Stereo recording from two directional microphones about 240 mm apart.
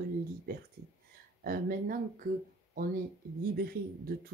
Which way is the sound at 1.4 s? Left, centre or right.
Right.